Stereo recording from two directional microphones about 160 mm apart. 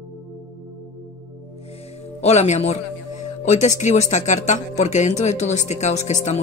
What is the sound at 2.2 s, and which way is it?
Speech, 45° left (ahead or behind).